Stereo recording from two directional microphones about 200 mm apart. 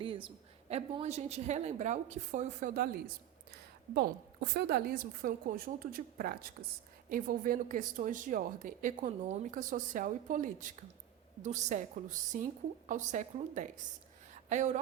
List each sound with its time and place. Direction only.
0.0 s a woman's voice: 25° right (ahead or behind)